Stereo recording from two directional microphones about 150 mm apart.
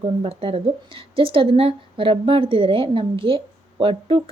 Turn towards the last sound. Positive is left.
turn(degrees=-35)  # may be behind; listen again after turning